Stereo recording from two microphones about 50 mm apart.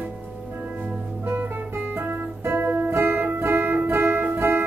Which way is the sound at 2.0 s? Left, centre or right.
Right.